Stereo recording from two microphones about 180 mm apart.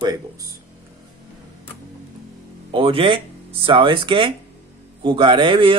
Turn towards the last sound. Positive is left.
turn(degrees=-30)  # may be behind; listen again after turning